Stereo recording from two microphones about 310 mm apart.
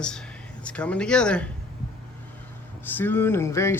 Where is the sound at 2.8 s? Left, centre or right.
Centre.